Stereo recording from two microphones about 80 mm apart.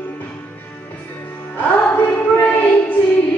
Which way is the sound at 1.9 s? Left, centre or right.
Centre.